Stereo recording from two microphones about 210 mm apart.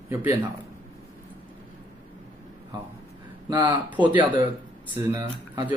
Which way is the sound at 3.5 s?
20° right (ahead or behind).